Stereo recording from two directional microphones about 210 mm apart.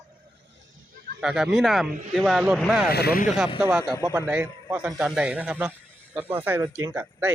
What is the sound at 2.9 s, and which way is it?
Speech, 45° left (ahead or behind).